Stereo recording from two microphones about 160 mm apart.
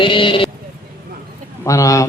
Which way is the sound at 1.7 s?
20° left (ahead or behind).